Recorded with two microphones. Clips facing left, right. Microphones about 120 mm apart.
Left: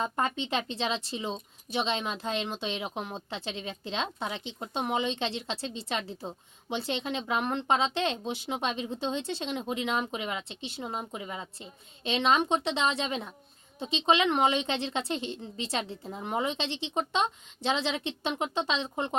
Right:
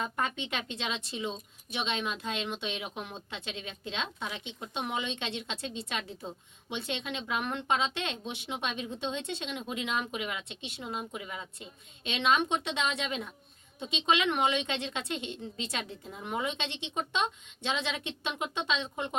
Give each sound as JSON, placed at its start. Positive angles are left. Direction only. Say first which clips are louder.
{"t": 0.0, "sound": "speech", "louder": "left 3 dB", "side_deg": 30}